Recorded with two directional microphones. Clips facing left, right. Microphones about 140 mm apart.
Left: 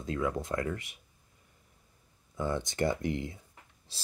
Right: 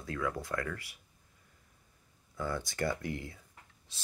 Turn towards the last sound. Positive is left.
turn(degrees=35)  # may be behind; listen again after turning